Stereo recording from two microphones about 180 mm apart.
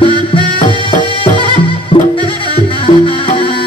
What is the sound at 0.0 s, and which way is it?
Music, 30° left (ahead or behind).